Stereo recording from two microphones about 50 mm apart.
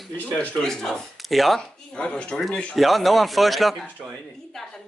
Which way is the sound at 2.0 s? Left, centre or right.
Left.